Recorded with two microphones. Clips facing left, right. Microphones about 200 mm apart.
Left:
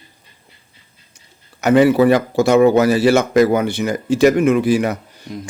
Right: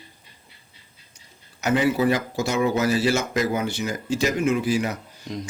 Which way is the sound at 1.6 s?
65° left (ahead or behind).